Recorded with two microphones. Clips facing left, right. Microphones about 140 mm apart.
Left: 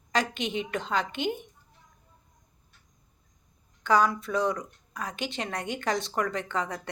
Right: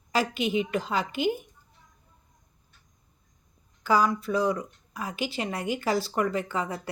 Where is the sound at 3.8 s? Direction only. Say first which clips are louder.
Even; 5° right (ahead or behind).